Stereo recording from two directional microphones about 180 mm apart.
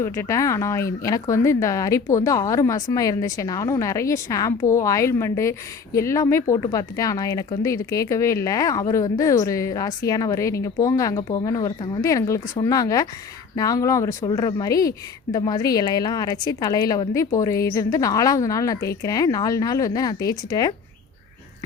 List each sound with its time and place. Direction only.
0.0 s speech: 15° left (ahead or behind)